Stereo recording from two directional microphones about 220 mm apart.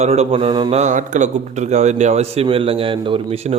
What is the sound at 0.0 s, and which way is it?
A man's voice, 30° right (ahead or behind).